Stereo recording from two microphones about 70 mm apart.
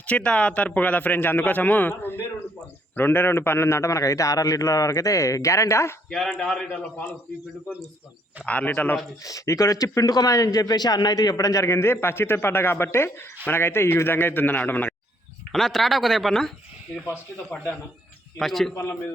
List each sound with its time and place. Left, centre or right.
0.1 s a man's voice: centre; by 6.0 s left
6.1 s a man's voice: centre
8.4 s a man's voice: left
9.2 s a man's voice: left
15.5 s speech: centre
18.3 s speech: centre